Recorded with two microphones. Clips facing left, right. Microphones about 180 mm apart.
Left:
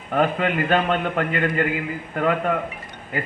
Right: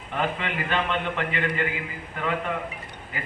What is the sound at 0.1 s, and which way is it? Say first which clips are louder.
A man's voice: left 7 dB; 45° left (ahead or behind).